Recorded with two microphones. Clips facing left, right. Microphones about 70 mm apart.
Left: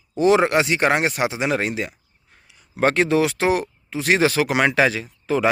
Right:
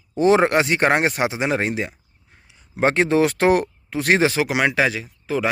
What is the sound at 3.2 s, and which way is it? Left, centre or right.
Speech, right.